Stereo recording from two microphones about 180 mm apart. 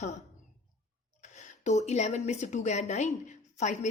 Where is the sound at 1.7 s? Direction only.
40° left (ahead or behind).